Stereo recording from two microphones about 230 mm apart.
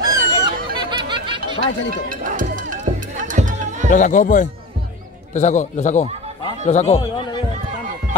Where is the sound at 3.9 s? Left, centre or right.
Left.